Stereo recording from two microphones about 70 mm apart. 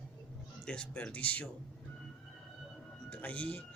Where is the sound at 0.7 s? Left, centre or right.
Centre.